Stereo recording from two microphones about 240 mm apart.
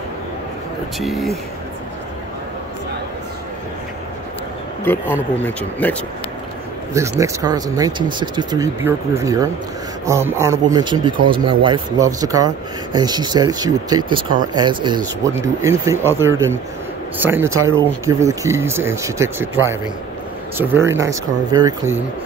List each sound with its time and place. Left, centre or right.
0.9 s speech: centre
4.8 s speech: centre
6.9 s speech: centre
17.6 s speech: right
17.8 s speech: centre